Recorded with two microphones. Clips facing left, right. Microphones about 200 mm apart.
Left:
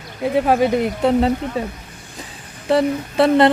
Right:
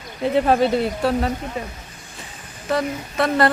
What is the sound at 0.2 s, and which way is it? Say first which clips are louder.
Speech: left 1 dB; 10° left (ahead or behind).